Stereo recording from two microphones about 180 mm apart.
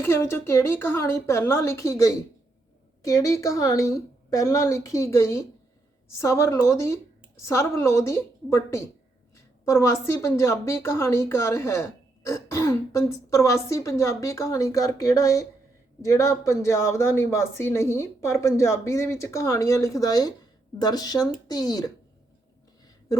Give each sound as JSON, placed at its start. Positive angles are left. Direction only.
{"t": 0.0, "sound": "a woman's voice", "side_deg": 15}